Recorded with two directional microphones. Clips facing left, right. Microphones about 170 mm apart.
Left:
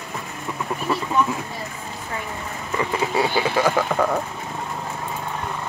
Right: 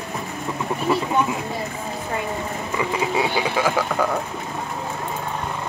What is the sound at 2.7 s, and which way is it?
Speech, 10° right (ahead or behind).